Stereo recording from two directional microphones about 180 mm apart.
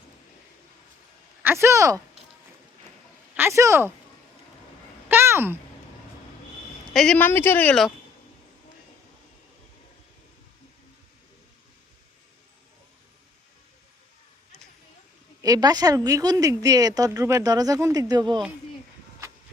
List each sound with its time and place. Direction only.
1.4 s speech: 15° right (ahead or behind)
3.3 s speech: 15° right (ahead or behind)
5.0 s a sound: 10° right (ahead or behind)
6.9 s speech: 5° left (ahead or behind)
15.4 s a woman's voice: 20° right (ahead or behind)